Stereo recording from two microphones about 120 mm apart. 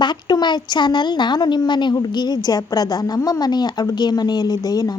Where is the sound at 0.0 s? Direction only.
35° left (ahead or behind).